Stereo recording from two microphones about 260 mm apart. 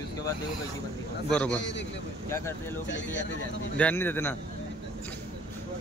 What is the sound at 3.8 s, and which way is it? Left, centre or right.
Speech, centre.